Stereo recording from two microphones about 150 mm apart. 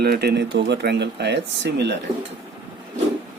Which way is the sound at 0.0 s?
90° right.